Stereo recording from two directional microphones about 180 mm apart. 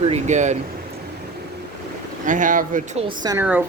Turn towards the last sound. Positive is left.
turn(degrees=-10)  # may be behind; listen again after turning